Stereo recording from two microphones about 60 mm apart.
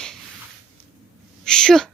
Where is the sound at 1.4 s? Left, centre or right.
Centre.